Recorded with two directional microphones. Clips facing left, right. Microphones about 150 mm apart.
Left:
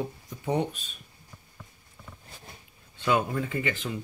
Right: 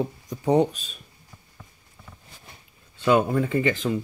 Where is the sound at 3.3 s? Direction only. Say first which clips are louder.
Right 7 dB; 40° right (ahead or behind).